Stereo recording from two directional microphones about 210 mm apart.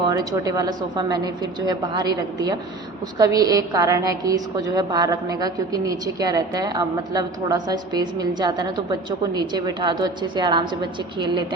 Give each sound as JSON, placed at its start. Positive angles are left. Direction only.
{"t": 0.0, "sound": "a woman's voice", "side_deg": -15}